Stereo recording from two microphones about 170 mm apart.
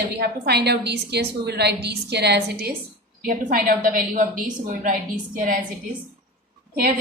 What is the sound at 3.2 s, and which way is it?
A woman's voice, 60° right (ahead or behind).